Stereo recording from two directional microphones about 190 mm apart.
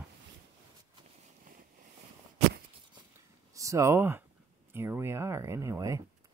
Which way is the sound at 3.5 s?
15° right (ahead or behind).